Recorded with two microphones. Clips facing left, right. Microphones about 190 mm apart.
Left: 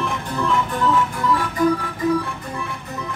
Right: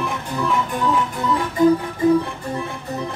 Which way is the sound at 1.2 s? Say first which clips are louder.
Right 4 dB; 20° right (ahead or behind).